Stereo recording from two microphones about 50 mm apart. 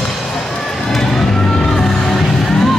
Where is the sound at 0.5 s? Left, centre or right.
Centre.